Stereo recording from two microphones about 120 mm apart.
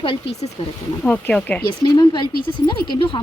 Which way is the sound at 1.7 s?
40° left (ahead or behind).